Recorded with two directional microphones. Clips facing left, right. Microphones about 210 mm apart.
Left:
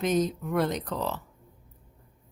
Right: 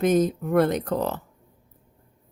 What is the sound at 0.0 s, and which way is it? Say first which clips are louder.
Speech: right 5 dB; 50° right (ahead or behind).